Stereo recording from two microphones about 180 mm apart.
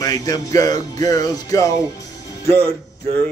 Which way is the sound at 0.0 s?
20° left (ahead or behind).